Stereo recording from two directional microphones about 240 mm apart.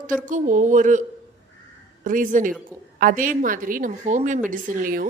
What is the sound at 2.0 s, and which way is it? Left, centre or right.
A woman's voice, right.